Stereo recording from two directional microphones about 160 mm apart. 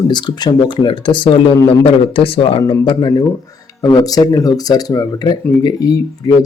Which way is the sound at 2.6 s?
25° left (ahead or behind).